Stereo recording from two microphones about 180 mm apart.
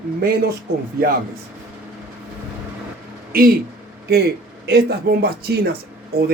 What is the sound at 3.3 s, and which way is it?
Speech, 55° right (ahead or behind).